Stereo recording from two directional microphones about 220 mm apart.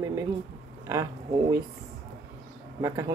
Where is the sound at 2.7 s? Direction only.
15° right (ahead or behind).